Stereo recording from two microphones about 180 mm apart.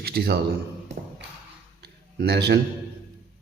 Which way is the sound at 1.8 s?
60° right (ahead or behind).